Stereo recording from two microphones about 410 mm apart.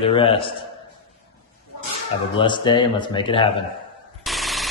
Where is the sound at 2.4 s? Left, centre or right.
Centre.